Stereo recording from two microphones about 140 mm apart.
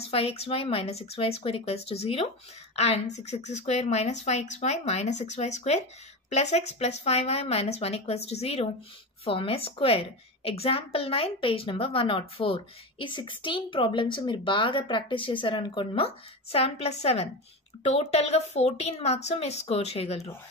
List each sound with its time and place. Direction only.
0.0 s a woman's voice: 45° left (ahead or behind)